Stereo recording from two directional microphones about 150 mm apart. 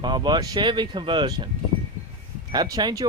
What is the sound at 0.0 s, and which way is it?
Speech, 30° right (ahead or behind).